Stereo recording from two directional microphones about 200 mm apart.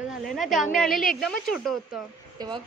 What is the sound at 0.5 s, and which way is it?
Speech, 40° left (ahead or behind).